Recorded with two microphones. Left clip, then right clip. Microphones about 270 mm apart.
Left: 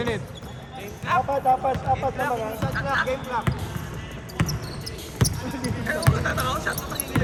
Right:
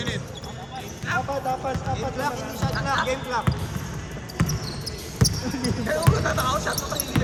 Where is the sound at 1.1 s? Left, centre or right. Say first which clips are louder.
Left 4 dB; centre.